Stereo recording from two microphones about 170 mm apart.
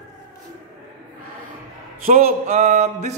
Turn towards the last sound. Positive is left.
turn(degrees=-45)  # may be behind; listen again after turning